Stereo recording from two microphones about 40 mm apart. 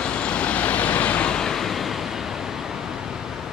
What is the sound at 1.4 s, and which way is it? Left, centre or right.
Waves, centre.